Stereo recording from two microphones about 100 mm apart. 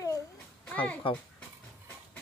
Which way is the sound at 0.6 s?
15° left (ahead or behind).